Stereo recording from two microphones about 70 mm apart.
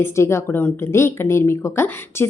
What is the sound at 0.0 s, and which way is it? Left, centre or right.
Speech, left.